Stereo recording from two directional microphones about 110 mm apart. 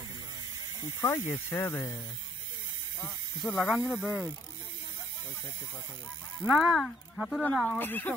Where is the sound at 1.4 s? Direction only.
20° left (ahead or behind).